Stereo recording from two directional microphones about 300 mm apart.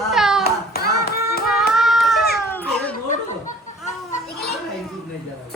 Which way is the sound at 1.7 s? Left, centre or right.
Centre.